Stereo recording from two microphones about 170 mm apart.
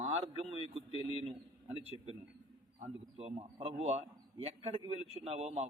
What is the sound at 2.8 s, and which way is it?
Speech, 35° right (ahead or behind).